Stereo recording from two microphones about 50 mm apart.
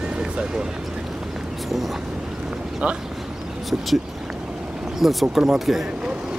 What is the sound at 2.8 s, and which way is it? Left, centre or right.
Vehicle, right.